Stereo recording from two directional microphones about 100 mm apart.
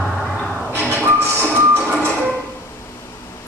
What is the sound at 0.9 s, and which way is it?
Music, 25° right (ahead or behind).